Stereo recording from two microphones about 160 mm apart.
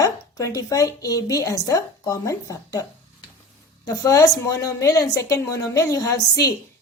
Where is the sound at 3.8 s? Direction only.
20° left (ahead or behind).